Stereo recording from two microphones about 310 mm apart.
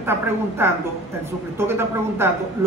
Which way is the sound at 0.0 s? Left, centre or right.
Centre.